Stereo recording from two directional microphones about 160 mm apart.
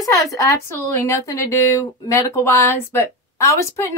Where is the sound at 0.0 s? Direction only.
20° left (ahead or behind).